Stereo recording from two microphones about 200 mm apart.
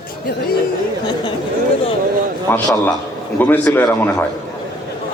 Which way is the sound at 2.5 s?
10° left (ahead or behind).